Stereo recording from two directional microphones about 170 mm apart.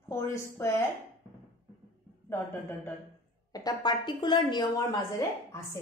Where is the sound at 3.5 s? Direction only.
25° left (ahead or behind).